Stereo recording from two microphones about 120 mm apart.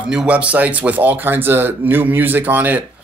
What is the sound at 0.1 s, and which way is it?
Speech, 10° right (ahead or behind).